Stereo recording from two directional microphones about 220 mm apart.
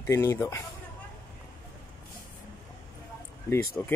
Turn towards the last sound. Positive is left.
turn(degrees=10)  # may be behind; listen again after turning